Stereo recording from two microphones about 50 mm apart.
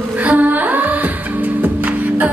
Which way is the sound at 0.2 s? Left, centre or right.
Right.